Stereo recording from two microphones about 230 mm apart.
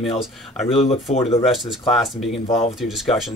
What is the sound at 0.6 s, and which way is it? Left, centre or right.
Speech, left.